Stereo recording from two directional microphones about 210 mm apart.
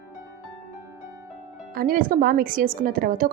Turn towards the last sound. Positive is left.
turn(degrees=-40)  # may be behind; listen again after turning